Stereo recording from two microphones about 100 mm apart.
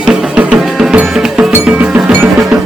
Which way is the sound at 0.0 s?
10° right (ahead or behind).